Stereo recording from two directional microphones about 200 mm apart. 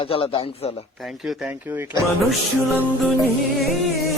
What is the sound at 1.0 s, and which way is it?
Speech, centre (ahead or behind).